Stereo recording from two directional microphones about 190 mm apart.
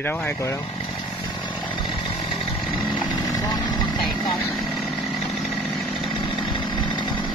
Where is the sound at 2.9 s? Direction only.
20° left (ahead or behind).